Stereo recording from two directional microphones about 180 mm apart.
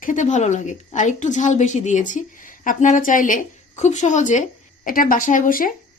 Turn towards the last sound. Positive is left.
turn(degrees=50)  # may be behind; listen again after turning